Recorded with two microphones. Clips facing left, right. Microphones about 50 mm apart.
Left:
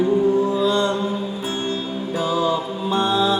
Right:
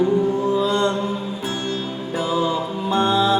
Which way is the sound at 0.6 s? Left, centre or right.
Right.